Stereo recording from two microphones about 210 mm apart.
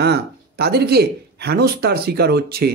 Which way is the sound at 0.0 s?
50° right (ahead or behind).